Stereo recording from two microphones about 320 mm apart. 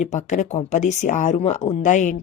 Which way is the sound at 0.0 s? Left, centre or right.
Left.